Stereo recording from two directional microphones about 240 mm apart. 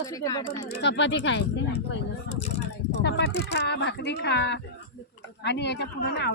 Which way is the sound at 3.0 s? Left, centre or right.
Left.